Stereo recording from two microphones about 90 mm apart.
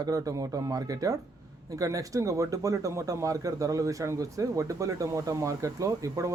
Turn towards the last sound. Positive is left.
turn(degrees=-35)  # may be behind; listen again after turning